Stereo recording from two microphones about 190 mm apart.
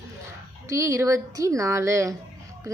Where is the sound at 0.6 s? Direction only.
15° right (ahead or behind).